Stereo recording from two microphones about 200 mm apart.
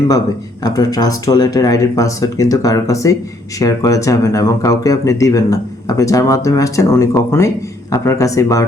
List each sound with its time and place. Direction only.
0.6 s speech: 15° left (ahead or behind)